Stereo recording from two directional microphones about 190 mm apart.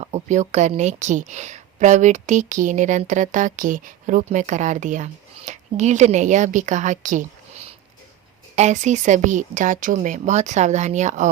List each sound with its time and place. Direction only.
0.0 s a woman's voice: 40° right (ahead or behind)